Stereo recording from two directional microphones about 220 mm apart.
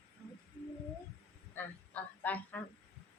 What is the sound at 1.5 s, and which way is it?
Speech, 5° left (ahead or behind).